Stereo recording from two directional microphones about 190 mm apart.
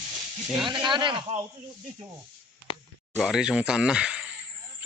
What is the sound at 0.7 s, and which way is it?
Speech, 25° right (ahead or behind).